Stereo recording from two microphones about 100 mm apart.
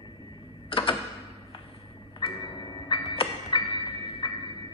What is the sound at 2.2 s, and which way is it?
Music, 55° left (ahead or behind).